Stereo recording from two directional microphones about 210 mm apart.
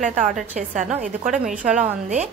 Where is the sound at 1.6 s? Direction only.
5° right (ahead or behind).